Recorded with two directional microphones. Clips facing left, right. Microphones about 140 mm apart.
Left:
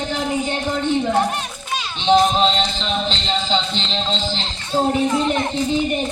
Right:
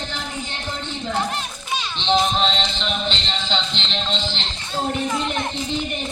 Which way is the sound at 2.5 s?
40° left (ahead or behind).